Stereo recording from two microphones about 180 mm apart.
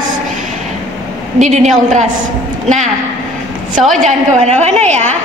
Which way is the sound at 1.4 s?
40° right (ahead or behind).